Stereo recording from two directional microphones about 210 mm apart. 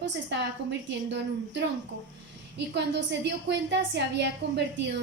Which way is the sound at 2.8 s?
55° right (ahead or behind).